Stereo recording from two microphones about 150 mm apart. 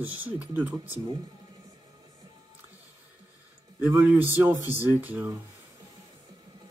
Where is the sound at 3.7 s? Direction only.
10° right (ahead or behind).